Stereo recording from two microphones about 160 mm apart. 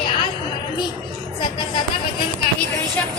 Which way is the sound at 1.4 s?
30° left (ahead or behind).